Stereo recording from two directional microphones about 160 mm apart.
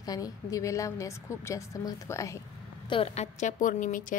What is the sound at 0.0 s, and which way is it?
A woman's voice, 20° left (ahead or behind).